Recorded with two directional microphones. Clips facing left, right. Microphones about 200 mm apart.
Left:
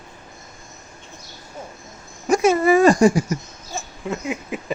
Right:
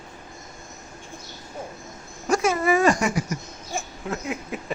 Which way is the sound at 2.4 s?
25° left (ahead or behind).